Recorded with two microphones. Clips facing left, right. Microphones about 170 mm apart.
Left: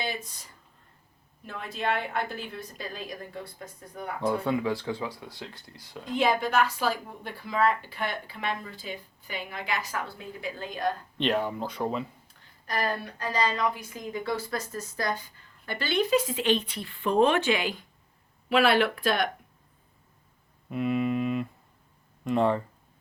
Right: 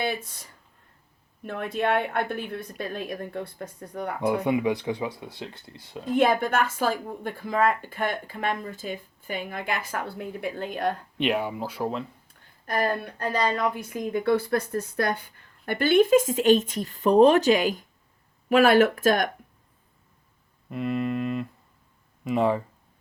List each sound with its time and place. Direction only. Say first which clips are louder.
1.5 s a woman's voice: right 5 dB; 60° right (ahead or behind)
4.3 s speech: right 3 dB; 15° right (ahead or behind)
6.1 s speech: right 2 dB; 50° right (ahead or behind)
11.2 s speech: right 1 dB; 10° right (ahead or behind)
12.6 s speech: right 4 dB; 50° right (ahead or behind)
20.7 s a sound: even; centre (ahead or behind)
22.2 s speech: right 1 dB; 5° right (ahead or behind)